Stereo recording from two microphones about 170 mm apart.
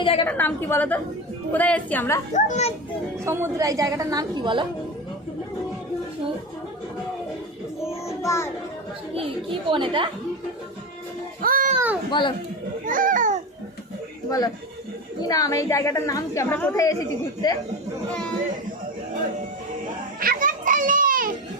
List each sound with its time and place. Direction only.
0.0 s a woman's voice: 30° left (ahead or behind)
0.3 s a woman's voice: 10° left (ahead or behind)
2.3 s a child's voice: 40° left (ahead or behind)
3.2 s a woman's voice: 15° right (ahead or behind)
7.9 s child singing: 15° left (ahead or behind)
9.1 s speech: 30° right (ahead or behind)
11.4 s a sound: 55° right (ahead or behind)
12.8 s speech: 50° right (ahead or behind)
14.3 s a woman's voice: 20° left (ahead or behind)
20.1 s children playing: 55° right (ahead or behind)